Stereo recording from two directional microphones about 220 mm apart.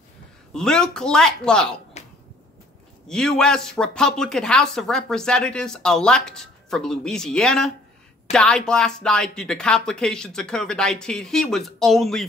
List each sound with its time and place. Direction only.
0.5 s speech: 5° left (ahead or behind)
2.0 s a sound: 30° left (ahead or behind)
3.1 s speech: 5° left (ahead or behind)